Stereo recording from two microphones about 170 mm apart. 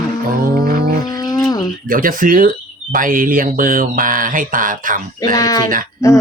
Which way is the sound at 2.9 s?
55° right (ahead or behind).